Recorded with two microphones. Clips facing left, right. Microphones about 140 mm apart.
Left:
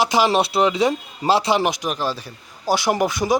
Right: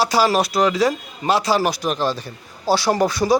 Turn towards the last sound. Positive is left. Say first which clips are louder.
# right 2 dB
turn(degrees=20)  # may be behind; listen again after turning